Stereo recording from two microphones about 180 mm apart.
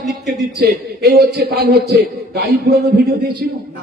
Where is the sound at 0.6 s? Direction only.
60° right (ahead or behind).